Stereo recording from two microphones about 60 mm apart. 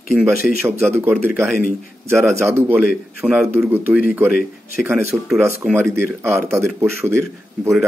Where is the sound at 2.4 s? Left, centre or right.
Right.